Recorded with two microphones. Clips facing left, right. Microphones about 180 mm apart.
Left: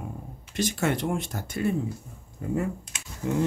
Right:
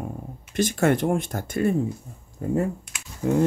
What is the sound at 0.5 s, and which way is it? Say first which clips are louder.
Speech: right 5 dB; 50° right (ahead or behind).